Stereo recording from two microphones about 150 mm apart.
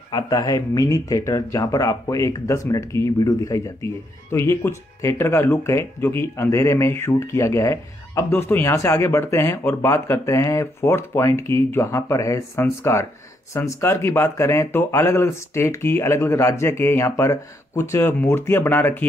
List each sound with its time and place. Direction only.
0.1 s speech: 25° left (ahead or behind)